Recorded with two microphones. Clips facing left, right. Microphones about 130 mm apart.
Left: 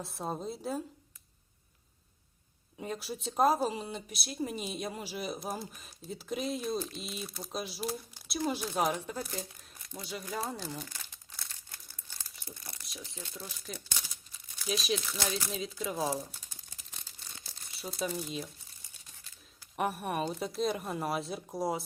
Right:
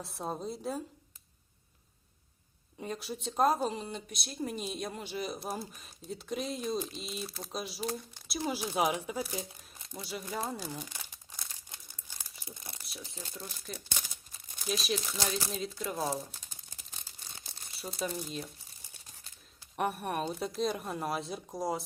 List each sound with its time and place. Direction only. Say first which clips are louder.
0.0 s speech: even; centre (ahead or behind)
2.7 s speech: even; centre (ahead or behind)
10.8 s crumpling: right 1 dB; 15° right (ahead or behind)
13.3 s speech: right 1 dB; centre (ahead or behind)
17.7 s speech: left 1 dB; centre (ahead or behind)
19.7 s speech: even; centre (ahead or behind)